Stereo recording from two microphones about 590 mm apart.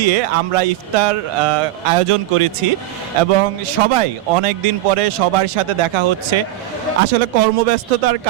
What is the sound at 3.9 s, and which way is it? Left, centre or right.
Speech, right.